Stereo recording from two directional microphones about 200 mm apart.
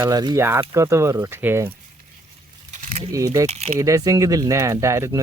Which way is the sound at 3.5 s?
30° right (ahead or behind).